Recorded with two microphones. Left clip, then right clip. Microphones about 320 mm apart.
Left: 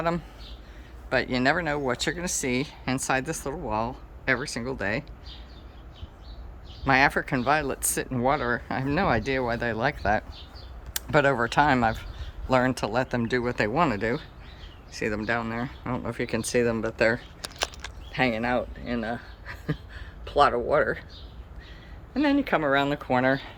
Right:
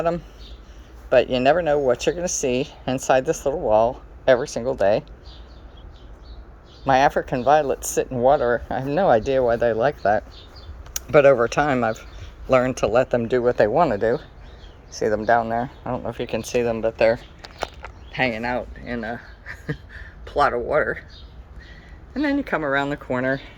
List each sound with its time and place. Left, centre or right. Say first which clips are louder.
1.1 s speech: right 8 dB; centre
6.8 s speech: right 4 dB; centre
7.3 s speech: right 7 dB; centre
7.7 s speech: right 6 dB; left
7.9 s speech: right 8 dB; centre
18.1 s speech: right 2 dB; centre
22.1 s speech: right 1 dB; centre